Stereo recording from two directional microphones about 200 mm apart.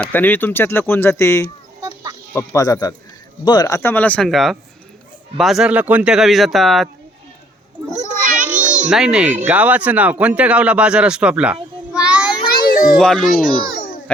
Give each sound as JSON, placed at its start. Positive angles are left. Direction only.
{"t": 0.0, "sound": "speech", "side_deg": 10}
{"t": 8.2, "sound": "child singing", "side_deg": -40}
{"t": 8.4, "sound": "music", "side_deg": -5}
{"t": 8.9, "sound": "speech", "side_deg": -5}
{"t": 11.9, "sound": "child singing", "side_deg": -5}
{"t": 12.6, "sound": "a sound", "side_deg": 45}
{"t": 13.0, "sound": "speech", "side_deg": 5}